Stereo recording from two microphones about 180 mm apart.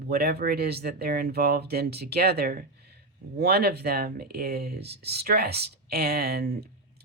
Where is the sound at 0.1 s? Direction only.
60° right (ahead or behind).